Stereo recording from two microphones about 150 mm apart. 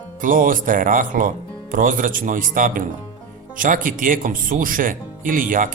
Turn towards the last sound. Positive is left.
turn(degrees=-65)  # may be behind; listen again after turning